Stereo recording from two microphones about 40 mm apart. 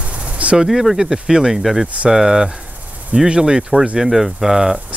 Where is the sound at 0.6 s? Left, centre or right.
Centre; by 3.6 s right.